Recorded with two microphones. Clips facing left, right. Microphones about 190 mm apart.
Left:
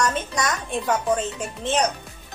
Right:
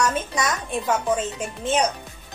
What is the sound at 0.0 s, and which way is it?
A woman's voice, 5° right (ahead or behind).